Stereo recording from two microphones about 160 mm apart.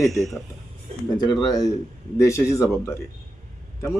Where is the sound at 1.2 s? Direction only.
25° left (ahead or behind).